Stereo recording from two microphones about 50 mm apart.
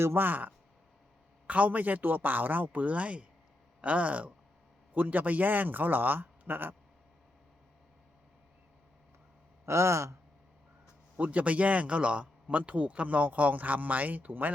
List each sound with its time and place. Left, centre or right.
0.2 s speech: right
9.6 s speech: right
11.2 s speech: right